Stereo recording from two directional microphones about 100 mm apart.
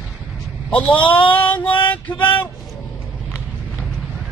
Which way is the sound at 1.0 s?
55° left (ahead or behind).